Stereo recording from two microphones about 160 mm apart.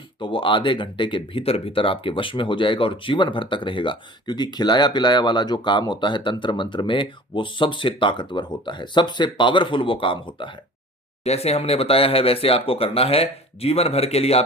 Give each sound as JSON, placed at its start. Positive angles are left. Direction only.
{"t": 0.2, "sound": "speech", "side_deg": 30}
{"t": 11.2, "sound": "speech", "side_deg": 40}